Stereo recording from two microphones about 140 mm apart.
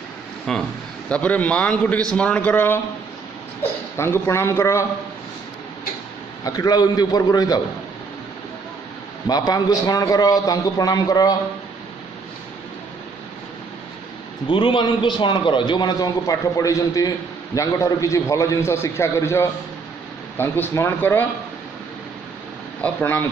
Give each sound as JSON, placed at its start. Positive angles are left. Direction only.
{"t": 0.5, "sound": "a man's voice", "side_deg": 5}
{"t": 3.9, "sound": "a man's voice", "side_deg": 20}
{"t": 6.4, "sound": "a man's voice", "side_deg": 25}
{"t": 9.5, "sound": "a man's voice", "side_deg": 25}
{"t": 14.5, "sound": "a man's voice", "side_deg": 40}
{"t": 22.8, "sound": "a man's voice", "side_deg": 10}